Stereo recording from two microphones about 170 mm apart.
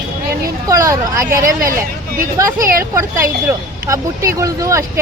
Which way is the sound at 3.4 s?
20° right (ahead or behind).